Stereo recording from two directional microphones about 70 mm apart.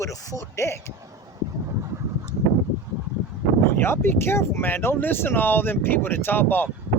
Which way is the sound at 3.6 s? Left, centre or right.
Left.